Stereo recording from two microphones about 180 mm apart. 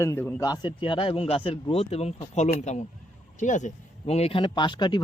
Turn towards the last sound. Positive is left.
turn(degrees=25)  # may be behind; listen again after turning